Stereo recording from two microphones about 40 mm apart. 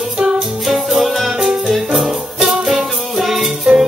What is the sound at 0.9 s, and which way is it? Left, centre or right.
Music, centre.